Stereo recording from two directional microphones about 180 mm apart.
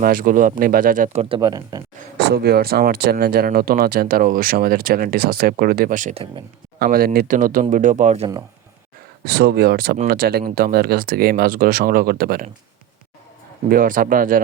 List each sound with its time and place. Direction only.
0.0 s speech: 50° right (ahead or behind)
1.4 s speech: 20° right (ahead or behind)
2.1 s speech: 65° right (ahead or behind); by 6.2 s 45° right (ahead or behind)
6.7 s speech: 55° right (ahead or behind); by 8.3 s 40° right (ahead or behind)
9.2 s speech: 65° right (ahead or behind)
13.7 s speech: 50° right (ahead or behind)